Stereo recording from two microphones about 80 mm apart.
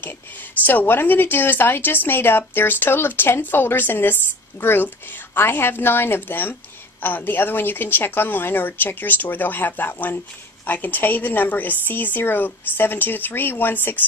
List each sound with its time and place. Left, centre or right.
0.7 s a woman's voice: left